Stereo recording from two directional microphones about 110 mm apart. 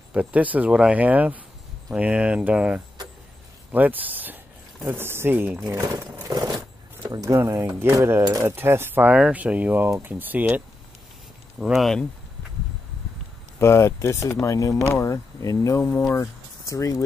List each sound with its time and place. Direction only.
0.1 s speech: 10° right (ahead or behind)
6.2 s a sound: 40° right (ahead or behind)
7.1 s speech: 30° right (ahead or behind)
11.6 s speech: centre (ahead or behind)
13.6 s speech: 25° left (ahead or behind)
16.2 s a sound: 30° left (ahead or behind)